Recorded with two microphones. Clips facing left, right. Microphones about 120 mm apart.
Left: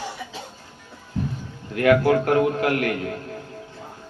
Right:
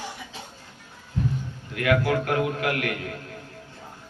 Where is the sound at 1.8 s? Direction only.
35° left (ahead or behind).